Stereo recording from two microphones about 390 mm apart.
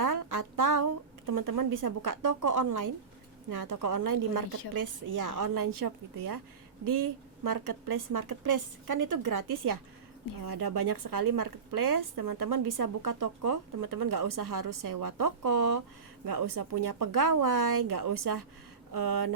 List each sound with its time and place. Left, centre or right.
0.0 s music: right
1.3 s a woman's voice: right
10.4 s a woman's voice: right